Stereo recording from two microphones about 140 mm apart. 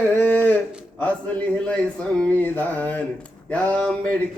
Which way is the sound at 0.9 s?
10° left (ahead or behind).